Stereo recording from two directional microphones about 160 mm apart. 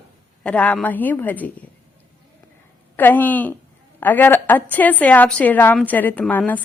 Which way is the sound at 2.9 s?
10° left (ahead or behind).